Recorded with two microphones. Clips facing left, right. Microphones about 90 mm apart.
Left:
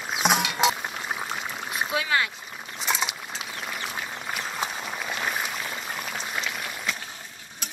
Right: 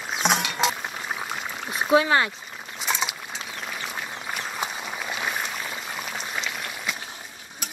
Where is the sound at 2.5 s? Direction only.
Centre (ahead or behind).